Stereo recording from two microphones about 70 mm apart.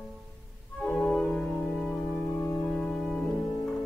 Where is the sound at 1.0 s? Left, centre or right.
Centre.